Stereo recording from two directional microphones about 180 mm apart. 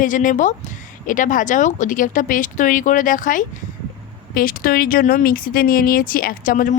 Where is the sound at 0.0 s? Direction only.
45° left (ahead or behind).